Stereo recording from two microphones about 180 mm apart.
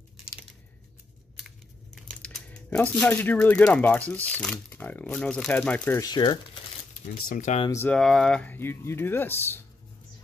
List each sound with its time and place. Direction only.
2.0 s speech: 5° left (ahead or behind); by 6.6 s 25° left (ahead or behind)
7.2 s speech: 45° left (ahead or behind)
7.7 s speech: 10° left (ahead or behind)